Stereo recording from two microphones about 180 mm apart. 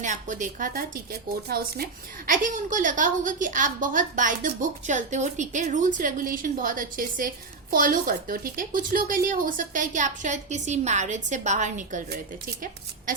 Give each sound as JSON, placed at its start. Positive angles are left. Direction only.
{"t": 0.0, "sound": "speech", "side_deg": -45}